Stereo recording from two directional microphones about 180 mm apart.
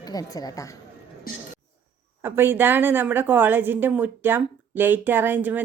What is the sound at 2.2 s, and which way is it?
A woman's voice, 10° right (ahead or behind).